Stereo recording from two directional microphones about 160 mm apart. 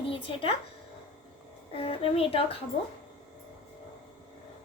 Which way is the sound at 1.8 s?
35° left (ahead or behind).